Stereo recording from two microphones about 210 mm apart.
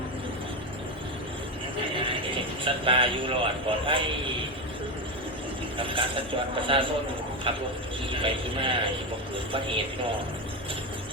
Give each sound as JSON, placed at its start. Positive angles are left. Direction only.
{"t": 1.9, "sound": "speech", "side_deg": -25}
{"t": 5.7, "sound": "a man's voice", "side_deg": -25}